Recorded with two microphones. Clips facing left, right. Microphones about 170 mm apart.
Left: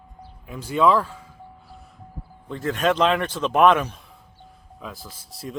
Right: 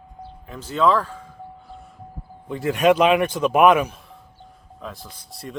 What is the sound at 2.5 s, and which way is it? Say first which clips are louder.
Speech: right 5 dB; 10° right (ahead or behind).